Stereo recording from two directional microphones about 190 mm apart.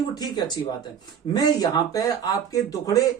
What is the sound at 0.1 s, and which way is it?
Speech, 20° left (ahead or behind).